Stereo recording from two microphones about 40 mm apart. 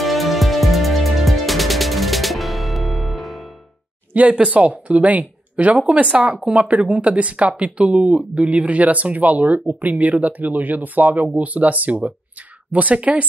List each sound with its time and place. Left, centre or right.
0.0 s music: centre
4.1 s speech: right